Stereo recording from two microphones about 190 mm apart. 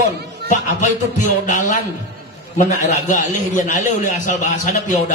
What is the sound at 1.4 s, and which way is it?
Speech, 40° left (ahead or behind).